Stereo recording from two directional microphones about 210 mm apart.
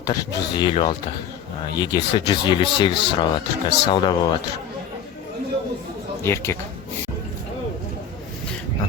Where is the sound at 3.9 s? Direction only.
20° left (ahead or behind).